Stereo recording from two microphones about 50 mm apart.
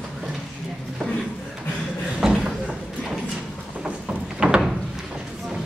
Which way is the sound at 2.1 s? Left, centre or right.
Centre.